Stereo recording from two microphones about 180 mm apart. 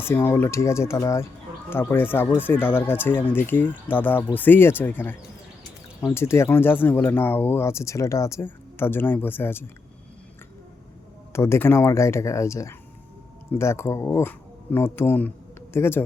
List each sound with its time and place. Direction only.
0.0 s speech: 10° left (ahead or behind)
11.3 s speech: 15° left (ahead or behind)